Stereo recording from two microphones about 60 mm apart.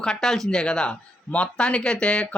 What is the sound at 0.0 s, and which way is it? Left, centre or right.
Speech, centre.